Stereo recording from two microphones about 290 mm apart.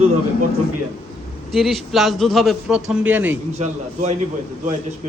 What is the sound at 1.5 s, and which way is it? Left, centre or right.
A man's voice, centre.